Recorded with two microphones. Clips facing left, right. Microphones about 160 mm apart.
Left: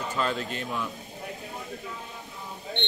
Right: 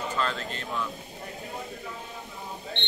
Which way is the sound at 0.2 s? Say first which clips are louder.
Left 4 dB; 15° left (ahead or behind).